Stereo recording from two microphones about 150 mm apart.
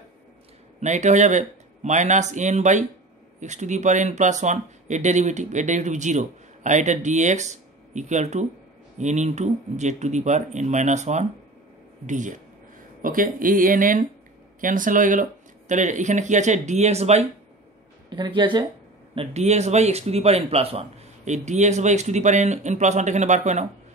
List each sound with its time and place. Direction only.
0.7 s speech: 50° right (ahead or behind)
18.1 s speech: 30° right (ahead or behind)
19.1 s speech: 45° right (ahead or behind)